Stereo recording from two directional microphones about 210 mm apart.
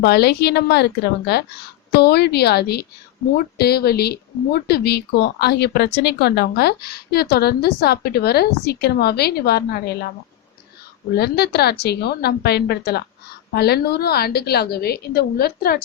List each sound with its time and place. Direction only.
0.0 s speech: 50° left (ahead or behind)
11.1 s speech: 50° left (ahead or behind)